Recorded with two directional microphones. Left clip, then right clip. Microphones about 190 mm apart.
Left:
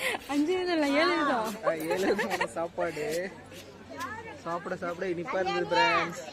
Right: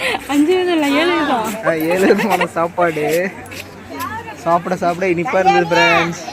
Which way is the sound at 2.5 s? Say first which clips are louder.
Right 16 dB; 35° right (ahead or behind).